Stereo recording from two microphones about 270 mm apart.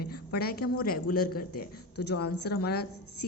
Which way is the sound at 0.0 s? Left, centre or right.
Left.